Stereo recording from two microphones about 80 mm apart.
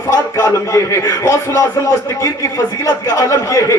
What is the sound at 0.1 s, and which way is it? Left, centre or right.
A man's voice, left.